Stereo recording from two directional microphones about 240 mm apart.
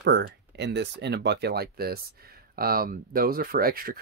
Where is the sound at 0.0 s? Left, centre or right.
Right.